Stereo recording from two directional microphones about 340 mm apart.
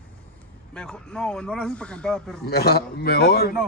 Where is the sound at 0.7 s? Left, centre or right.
Centre.